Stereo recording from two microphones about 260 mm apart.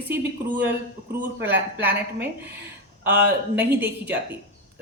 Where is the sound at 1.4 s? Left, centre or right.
Centre.